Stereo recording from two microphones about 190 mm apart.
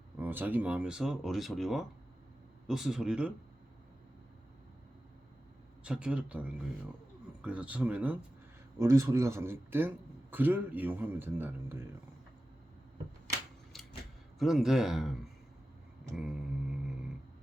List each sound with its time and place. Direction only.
0.2 s speech: 10° right (ahead or behind)
5.8 s a man's voice: 5° right (ahead or behind)
13.7 s a sound: centre (ahead or behind)
14.3 s speech: centre (ahead or behind)